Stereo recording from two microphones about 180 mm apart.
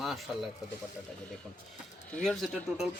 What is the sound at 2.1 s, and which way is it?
Speech, 5° left (ahead or behind).